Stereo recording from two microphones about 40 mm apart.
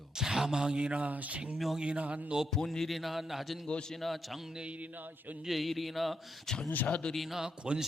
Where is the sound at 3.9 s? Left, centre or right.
Centre.